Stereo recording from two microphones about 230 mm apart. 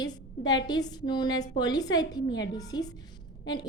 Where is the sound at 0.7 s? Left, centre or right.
Centre.